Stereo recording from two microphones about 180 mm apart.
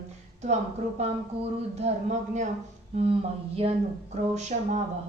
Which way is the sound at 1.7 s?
40° right (ahead or behind).